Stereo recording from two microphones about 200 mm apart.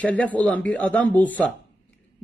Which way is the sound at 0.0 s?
5° left (ahead or behind).